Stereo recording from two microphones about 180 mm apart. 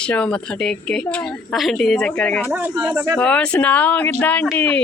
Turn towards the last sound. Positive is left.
turn(degrees=10)  # may be behind; listen again after turning